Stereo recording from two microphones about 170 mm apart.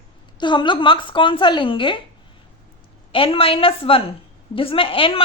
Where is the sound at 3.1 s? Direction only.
30° left (ahead or behind).